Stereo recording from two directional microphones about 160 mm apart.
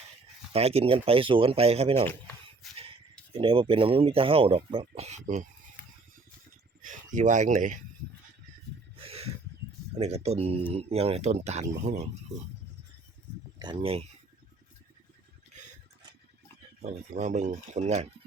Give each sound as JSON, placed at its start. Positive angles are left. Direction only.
{"t": 0.5, "sound": "speech", "side_deg": -40}
{"t": 2.6, "sound": "a sound", "side_deg": 0}
{"t": 3.3, "sound": "speech", "side_deg": -35}
{"t": 6.8, "sound": "speech", "side_deg": -55}
{"t": 9.0, "sound": "a sound", "side_deg": -40}
{"t": 10.0, "sound": "speech", "side_deg": -40}
{"t": 13.6, "sound": "speech", "side_deg": -30}
{"t": 16.8, "sound": "speech", "side_deg": -45}